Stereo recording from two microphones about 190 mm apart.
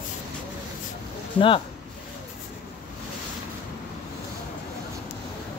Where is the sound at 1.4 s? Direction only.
25° left (ahead or behind).